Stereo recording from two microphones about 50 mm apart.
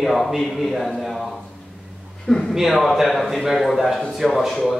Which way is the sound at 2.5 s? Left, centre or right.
Centre.